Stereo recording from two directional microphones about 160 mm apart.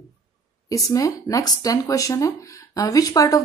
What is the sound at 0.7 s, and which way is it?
Speech, 20° left (ahead or behind).